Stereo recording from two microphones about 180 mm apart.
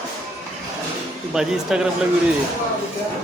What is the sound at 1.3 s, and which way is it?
Speech, 5° right (ahead or behind).